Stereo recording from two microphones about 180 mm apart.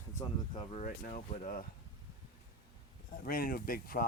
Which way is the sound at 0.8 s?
50° left (ahead or behind).